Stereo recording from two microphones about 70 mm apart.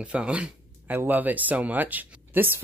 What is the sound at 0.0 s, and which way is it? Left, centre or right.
Speech, centre.